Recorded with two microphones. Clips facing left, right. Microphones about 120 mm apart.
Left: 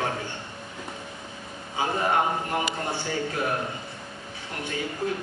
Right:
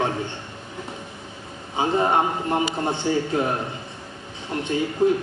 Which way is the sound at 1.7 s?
25° right (ahead or behind).